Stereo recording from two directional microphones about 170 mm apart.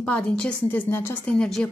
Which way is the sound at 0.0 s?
5° left (ahead or behind).